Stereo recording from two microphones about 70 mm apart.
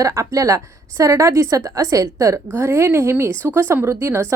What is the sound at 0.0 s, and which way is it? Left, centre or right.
A woman's voice, right.